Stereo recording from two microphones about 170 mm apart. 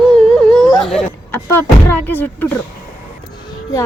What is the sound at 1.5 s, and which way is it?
Speech, 10° left (ahead or behind).